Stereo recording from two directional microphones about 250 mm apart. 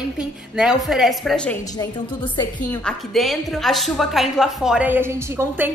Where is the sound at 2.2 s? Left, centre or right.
Centre.